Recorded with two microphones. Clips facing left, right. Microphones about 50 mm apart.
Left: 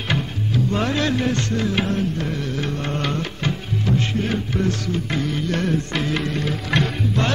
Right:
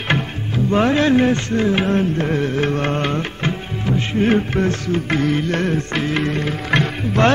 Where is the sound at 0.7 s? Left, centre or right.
Right.